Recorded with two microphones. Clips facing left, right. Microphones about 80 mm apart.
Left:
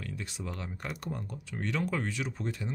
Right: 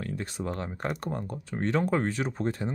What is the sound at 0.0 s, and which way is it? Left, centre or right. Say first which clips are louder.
Speech: right 6 dB; right.